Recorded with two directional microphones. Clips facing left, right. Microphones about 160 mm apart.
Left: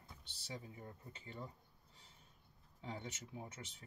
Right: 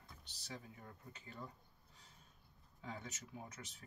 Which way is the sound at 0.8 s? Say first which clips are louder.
Left 3 dB; 30° left (ahead or behind).